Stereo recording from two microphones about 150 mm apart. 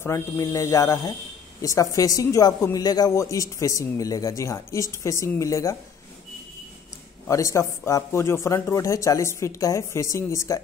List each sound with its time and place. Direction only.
0.0 s speech: 20° left (ahead or behind)
7.2 s speech: 20° left (ahead or behind)